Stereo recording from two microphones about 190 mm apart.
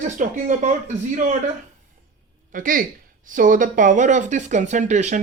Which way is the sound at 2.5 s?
45° right (ahead or behind).